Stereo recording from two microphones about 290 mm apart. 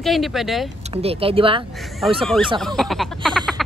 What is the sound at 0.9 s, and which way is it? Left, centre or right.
Speech, centre.